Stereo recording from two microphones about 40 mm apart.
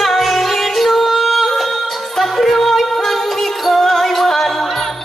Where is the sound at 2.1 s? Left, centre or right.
Centre.